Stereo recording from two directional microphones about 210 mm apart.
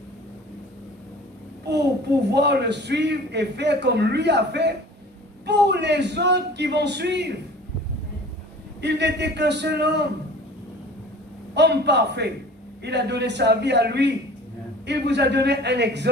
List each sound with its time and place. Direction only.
2.3 s a man's voice: 55° right (ahead or behind)
8.8 s a man's voice: 55° right (ahead or behind)
11.5 s a man's voice: 55° right (ahead or behind)